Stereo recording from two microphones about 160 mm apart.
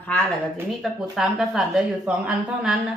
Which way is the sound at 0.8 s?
Centre (ahead or behind).